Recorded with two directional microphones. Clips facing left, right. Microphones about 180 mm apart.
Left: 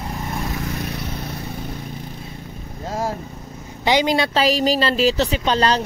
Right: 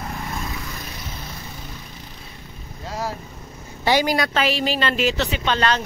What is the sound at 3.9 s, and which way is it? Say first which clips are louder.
Speech: left 2 dB; 20° left (ahead or behind).